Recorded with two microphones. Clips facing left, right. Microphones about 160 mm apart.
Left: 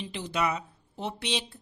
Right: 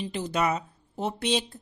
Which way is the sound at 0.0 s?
45° right (ahead or behind).